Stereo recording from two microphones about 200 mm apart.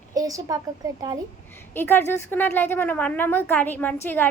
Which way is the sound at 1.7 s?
10° left (ahead or behind).